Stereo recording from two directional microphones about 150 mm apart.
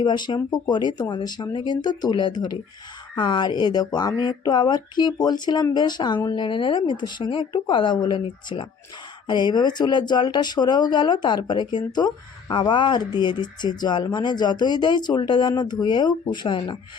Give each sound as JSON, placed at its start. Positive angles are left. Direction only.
{"t": 0.0, "sound": "speech", "side_deg": 30}